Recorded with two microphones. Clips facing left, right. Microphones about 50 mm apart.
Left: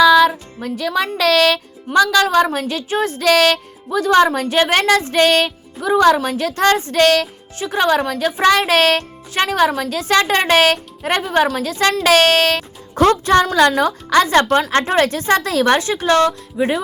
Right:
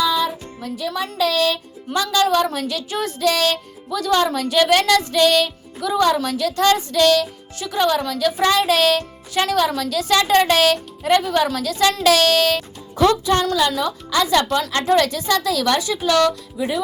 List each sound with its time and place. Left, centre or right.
0.0 s music: left
0.6 s speech: left
3.2 s speech: left
3.8 s speech: left
7.0 s speech: left
12.0 s speech: left
13.6 s speech: left
14.7 s speech: left
16.6 s speech: left